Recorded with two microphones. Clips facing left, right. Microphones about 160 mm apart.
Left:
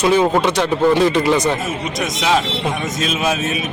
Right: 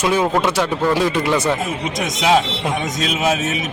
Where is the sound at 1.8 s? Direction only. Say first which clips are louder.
Right 2 dB; 20° right (ahead or behind).